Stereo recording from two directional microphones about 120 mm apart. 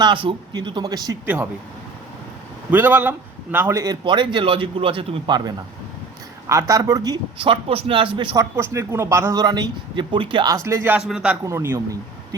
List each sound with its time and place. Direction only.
0.0 s speech: 45° right (ahead or behind)
1.2 s a man's voice: 10° right (ahead or behind)
2.6 s a man's voice: 15° right (ahead or behind)
4.0 s a man's voice: 40° right (ahead or behind)
8.4 s speech: 25° right (ahead or behind); by 10.5 s 40° right (ahead or behind)
10.5 s speech: 25° right (ahead or behind)
11.1 s a man's voice: 5° right (ahead or behind)
11.4 s speech: 20° right (ahead or behind)